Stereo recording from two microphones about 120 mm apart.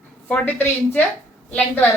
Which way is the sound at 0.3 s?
15° left (ahead or behind).